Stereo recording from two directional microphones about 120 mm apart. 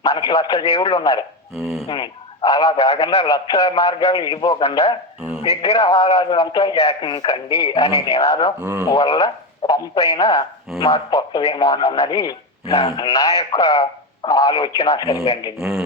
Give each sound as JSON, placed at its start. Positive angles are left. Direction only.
{"t": 0.0, "sound": "speech", "side_deg": 35}
{"t": 5.4, "sound": "speech", "side_deg": 60}
{"t": 5.7, "sound": "speech", "side_deg": 30}
{"t": 12.6, "sound": "speech", "side_deg": 55}
{"t": 13.1, "sound": "speech", "side_deg": 30}
{"t": 15.1, "sound": "speech", "side_deg": 55}
{"t": 15.5, "sound": "a man's voice", "side_deg": 0}